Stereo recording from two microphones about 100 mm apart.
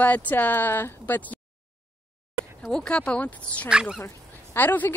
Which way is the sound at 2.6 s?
5° left (ahead or behind).